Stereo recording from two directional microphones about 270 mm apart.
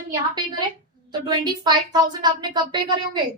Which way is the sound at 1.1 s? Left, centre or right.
Centre.